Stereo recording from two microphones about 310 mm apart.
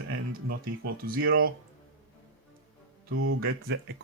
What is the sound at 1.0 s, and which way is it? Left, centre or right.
Speech, right.